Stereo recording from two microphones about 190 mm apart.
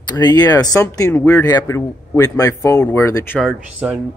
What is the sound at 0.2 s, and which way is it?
Speech, 20° left (ahead or behind).